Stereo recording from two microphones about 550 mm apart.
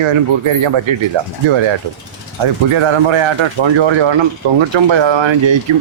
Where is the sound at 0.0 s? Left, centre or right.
Right.